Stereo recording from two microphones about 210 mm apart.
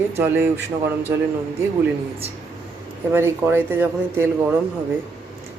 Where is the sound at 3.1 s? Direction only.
10° right (ahead or behind).